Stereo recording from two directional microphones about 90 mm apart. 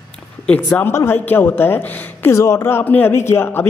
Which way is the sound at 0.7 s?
30° left (ahead or behind).